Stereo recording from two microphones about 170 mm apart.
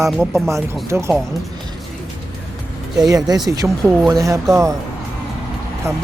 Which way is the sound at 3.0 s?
20° right (ahead or behind).